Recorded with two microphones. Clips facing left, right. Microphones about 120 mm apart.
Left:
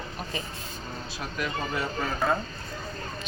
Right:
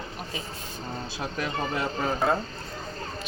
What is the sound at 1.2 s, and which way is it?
Speech, 25° right (ahead or behind).